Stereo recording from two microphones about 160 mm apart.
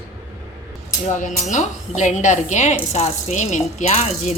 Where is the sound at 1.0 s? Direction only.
50° left (ahead or behind).